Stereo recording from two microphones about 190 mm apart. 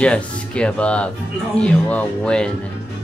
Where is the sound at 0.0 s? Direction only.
5° left (ahead or behind).